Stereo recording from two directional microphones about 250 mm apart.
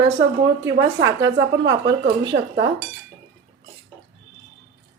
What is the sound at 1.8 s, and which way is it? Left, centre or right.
Speech, right.